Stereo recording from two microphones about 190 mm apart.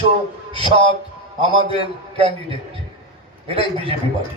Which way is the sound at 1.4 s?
30° right (ahead or behind).